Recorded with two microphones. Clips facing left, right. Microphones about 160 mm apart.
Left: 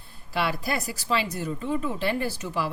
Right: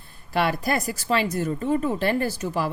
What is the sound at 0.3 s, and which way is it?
Speech, 50° right (ahead or behind).